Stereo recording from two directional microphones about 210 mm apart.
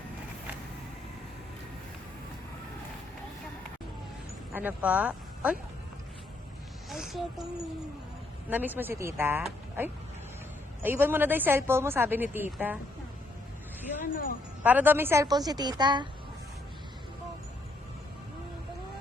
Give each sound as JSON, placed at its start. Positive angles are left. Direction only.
{"t": 4.5, "sound": "speech", "side_deg": -5}
{"t": 6.9, "sound": "speech", "side_deg": 0}
{"t": 8.4, "sound": "speech", "side_deg": -10}
{"t": 10.8, "sound": "speech", "side_deg": -10}
{"t": 14.0, "sound": "a woman's voice", "side_deg": 40}
{"t": 14.6, "sound": "speech", "side_deg": -10}